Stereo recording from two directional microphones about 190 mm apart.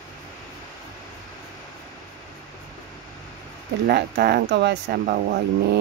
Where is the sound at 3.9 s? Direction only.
60° right (ahead or behind).